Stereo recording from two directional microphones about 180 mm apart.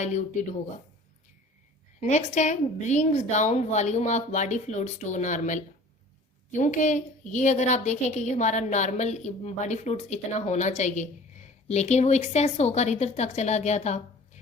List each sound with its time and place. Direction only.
0.0 s a woman's voice: 40° left (ahead or behind)
2.0 s a woman's voice: 40° left (ahead or behind)